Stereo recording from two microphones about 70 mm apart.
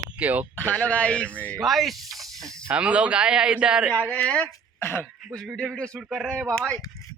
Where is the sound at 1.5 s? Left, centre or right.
Centre.